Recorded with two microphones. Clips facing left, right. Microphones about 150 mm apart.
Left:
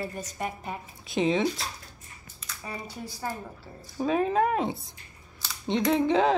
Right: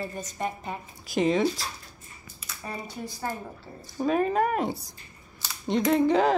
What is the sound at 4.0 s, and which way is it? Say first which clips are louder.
Speech: even; centre (ahead or behind).